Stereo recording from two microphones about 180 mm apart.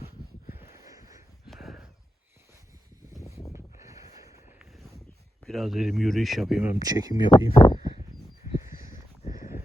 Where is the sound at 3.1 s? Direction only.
20° left (ahead or behind).